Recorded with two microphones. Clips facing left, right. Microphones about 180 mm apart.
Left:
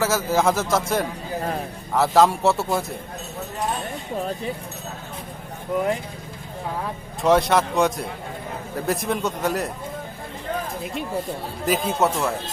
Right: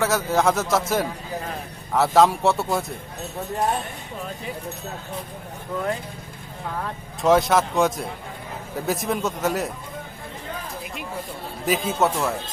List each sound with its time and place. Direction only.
0.0 s speech: centre (ahead or behind)
5.7 s speech: 15° left (ahead or behind)
7.2 s speech: centre (ahead or behind)
11.6 s speech: centre (ahead or behind)